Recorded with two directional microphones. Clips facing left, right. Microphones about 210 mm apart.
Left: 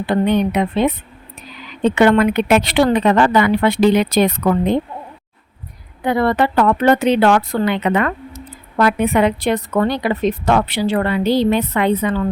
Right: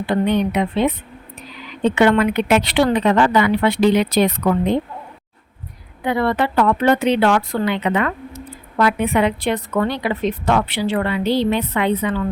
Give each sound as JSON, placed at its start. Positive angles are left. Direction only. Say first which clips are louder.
{"t": 0.3, "sound": "a woman's voice", "louder": "left 2 dB", "side_deg": 45}
{"t": 2.0, "sound": "a woman's voice", "louder": "left 2 dB", "side_deg": 45}
{"t": 6.1, "sound": "a woman's voice", "louder": "left 3 dB", "side_deg": 45}